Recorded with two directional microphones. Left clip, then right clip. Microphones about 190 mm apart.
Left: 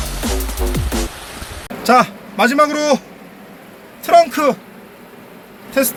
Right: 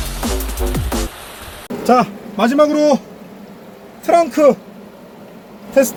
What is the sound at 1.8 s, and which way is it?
Vehicle, 10° left (ahead or behind).